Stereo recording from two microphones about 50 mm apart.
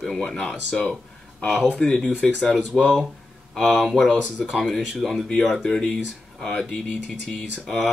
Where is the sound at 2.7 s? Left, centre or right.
Centre.